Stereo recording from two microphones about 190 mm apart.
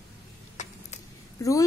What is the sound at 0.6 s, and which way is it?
Vehicle, 40° left (ahead or behind).